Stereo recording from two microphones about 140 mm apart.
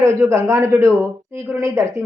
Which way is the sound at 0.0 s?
20° right (ahead or behind).